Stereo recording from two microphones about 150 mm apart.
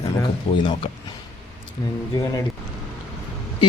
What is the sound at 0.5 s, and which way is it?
Speech, 35° left (ahead or behind).